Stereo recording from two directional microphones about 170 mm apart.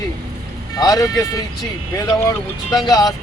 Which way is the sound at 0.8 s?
20° left (ahead or behind).